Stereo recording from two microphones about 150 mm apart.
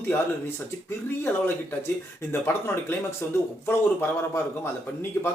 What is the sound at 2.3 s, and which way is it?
A man's voice, 15° left (ahead or behind).